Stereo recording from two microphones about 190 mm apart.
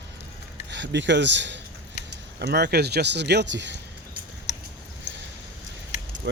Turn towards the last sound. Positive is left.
turn(degrees=-60)  # may be behind; listen again after turning